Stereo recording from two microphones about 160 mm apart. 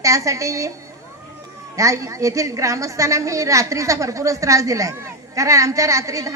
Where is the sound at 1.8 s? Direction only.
20° right (ahead or behind).